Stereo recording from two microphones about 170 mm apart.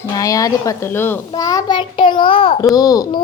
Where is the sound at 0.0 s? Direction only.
20° left (ahead or behind).